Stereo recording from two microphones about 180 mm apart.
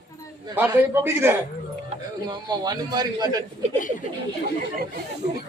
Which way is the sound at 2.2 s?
25° right (ahead or behind).